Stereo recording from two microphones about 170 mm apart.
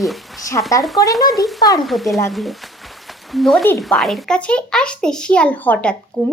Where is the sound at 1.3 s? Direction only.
Centre (ahead or behind).